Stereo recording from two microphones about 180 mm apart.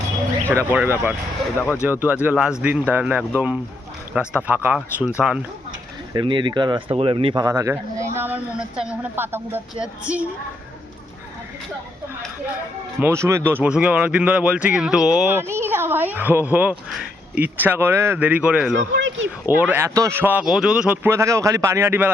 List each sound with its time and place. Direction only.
0.5 s speech: 10° right (ahead or behind)
6.1 s speech: 25° right (ahead or behind)
7.4 s speech: 15° right (ahead or behind)
13.0 s speech: 15° right (ahead or behind)
18.9 s speech: 90° right
19.5 s speech: 10° right (ahead or behind)